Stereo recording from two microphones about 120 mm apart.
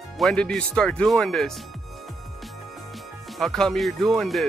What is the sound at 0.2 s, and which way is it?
Speech, 5° left (ahead or behind).